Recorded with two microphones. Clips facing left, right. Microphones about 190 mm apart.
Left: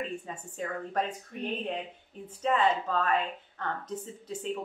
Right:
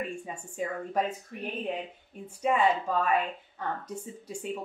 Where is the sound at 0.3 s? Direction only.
10° right (ahead or behind).